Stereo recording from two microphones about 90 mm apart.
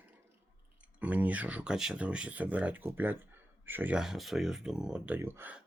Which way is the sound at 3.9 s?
5° right (ahead or behind).